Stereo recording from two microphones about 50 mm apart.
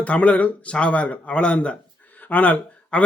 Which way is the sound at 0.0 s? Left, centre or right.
Left.